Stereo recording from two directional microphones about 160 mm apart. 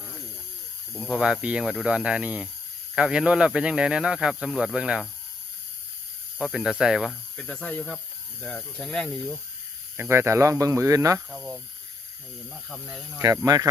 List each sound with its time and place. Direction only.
0.9 s speech: centre (ahead or behind)
6.4 s speech: 5° right (ahead or behind)
10.0 s speech: 15° right (ahead or behind)
11.3 s speech: 5° right (ahead or behind)
12.6 s speech: centre (ahead or behind)
13.1 s speech: 20° right (ahead or behind)